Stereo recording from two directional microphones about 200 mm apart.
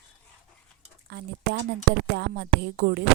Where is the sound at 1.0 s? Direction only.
55° right (ahead or behind).